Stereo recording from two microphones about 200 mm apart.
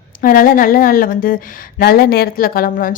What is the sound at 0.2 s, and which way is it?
A woman's voice, 45° left (ahead or behind).